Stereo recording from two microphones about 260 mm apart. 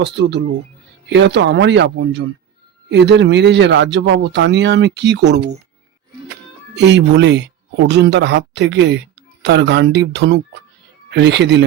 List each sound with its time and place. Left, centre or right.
0.0 s speech: right
6.7 s speech: right